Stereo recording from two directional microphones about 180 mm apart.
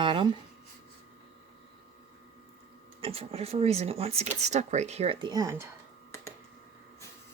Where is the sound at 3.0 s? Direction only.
30° right (ahead or behind).